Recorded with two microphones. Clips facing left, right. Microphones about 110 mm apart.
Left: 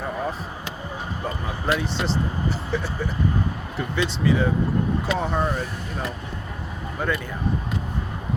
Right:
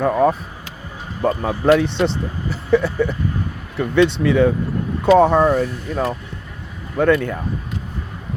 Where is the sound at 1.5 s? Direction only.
80° right.